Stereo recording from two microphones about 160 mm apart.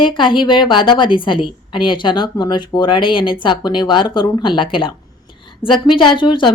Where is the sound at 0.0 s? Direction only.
30° left (ahead or behind).